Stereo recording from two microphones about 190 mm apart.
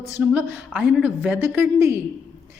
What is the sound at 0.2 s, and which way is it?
Speech, 10° right (ahead or behind).